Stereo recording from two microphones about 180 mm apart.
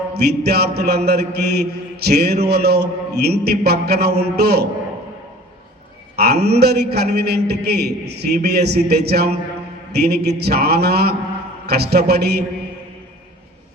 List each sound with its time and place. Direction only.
0.1 s a man's voice: 65° right (ahead or behind)
6.1 s a man's voice: 65° right (ahead or behind)